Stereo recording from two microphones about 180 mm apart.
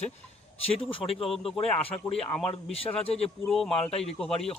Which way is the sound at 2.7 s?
35° left (ahead or behind).